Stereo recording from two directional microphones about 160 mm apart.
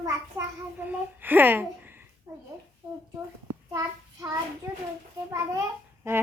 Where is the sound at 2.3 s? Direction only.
15° right (ahead or behind).